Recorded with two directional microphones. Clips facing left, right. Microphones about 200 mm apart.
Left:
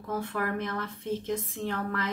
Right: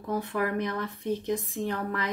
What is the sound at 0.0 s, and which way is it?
Speech, 15° right (ahead or behind).